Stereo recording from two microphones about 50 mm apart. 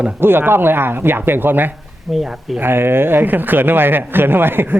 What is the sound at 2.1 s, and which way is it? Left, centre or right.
Speech, centre.